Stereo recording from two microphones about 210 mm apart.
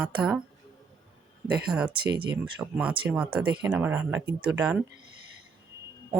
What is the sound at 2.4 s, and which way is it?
Speech, 5° right (ahead or behind).